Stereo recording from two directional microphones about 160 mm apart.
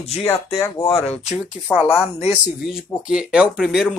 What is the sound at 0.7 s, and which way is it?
Speech, 35° left (ahead or behind).